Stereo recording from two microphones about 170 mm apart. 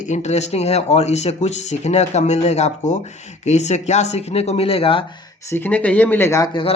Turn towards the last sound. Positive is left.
turn(degrees=25)  # may be behind; listen again after turning